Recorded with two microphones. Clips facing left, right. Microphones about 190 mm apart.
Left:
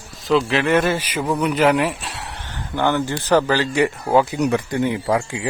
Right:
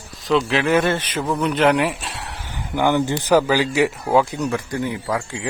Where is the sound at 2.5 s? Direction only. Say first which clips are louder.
Right 1 dB; 10° right (ahead or behind).